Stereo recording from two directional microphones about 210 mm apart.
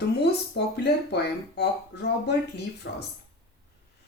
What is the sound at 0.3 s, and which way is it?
Speech, 50° left (ahead or behind).